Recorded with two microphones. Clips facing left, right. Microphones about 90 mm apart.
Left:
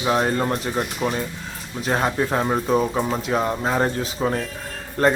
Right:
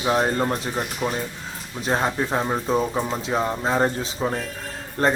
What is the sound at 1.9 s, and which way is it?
Speech, centre (ahead or behind).